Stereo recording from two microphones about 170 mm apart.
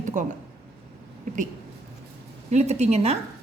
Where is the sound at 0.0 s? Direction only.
50° right (ahead or behind).